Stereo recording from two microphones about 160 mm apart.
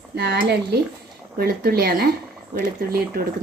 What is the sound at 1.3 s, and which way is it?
Speech, 70° right (ahead or behind).